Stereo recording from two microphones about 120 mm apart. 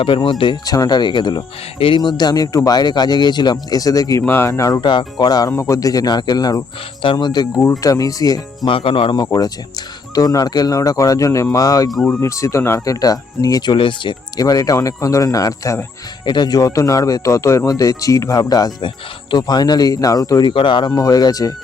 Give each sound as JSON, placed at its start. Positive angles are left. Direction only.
{"t": 0.0, "sound": "speech", "side_deg": 45}
{"t": 4.8, "sound": "speech", "side_deg": 40}
{"t": 8.7, "sound": "speech", "side_deg": 50}
{"t": 9.2, "sound": "speech", "side_deg": 30}
{"t": 16.2, "sound": "speech", "side_deg": 35}
{"t": 20.5, "sound": "speech", "side_deg": 45}